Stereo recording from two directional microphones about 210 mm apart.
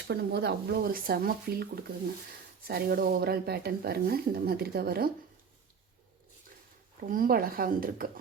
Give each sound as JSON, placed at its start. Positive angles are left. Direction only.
{"t": 0.1, "sound": "speech", "side_deg": -50}
{"t": 7.0, "sound": "speech", "side_deg": -40}